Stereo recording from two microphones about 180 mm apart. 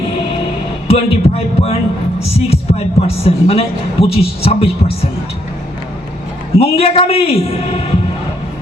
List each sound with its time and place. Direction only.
0.9 s speech: 35° left (ahead or behind)
6.6 s speech: 35° left (ahead or behind)